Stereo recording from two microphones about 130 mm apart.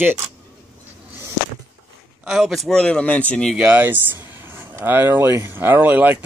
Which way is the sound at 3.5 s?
10° right (ahead or behind).